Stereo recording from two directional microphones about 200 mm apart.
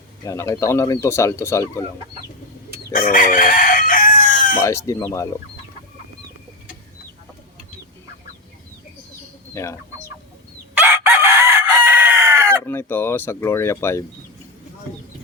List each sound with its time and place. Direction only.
0.3 s speech: 15° left (ahead or behind)
2.9 s chicken: 45° left (ahead or behind)
4.6 s speech: 15° left (ahead or behind)
9.6 s speech: 15° left (ahead or behind)
10.8 s chicken: 10° right (ahead or behind)
12.6 s speech: 10° left (ahead or behind)